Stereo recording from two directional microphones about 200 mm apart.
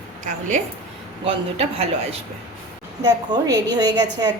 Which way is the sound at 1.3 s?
30° right (ahead or behind).